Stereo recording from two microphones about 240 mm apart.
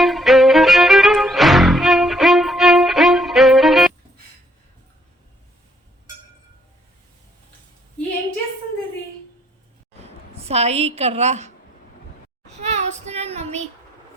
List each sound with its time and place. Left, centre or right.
0.0 s music: centre
10.0 s a woman's voice: right
12.5 s child singing: right